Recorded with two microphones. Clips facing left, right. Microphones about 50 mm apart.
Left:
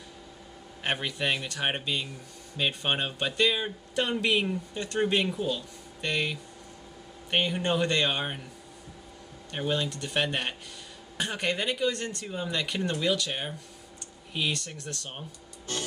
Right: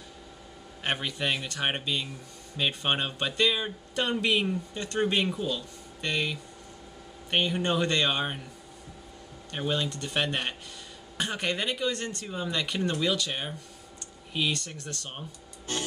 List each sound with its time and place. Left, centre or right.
0.8 s speech: centre
9.5 s speech: centre